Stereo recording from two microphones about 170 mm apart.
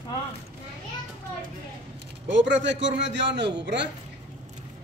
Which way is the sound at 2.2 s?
90° right.